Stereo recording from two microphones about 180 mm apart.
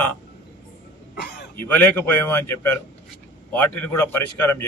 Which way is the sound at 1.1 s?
70° left (ahead or behind).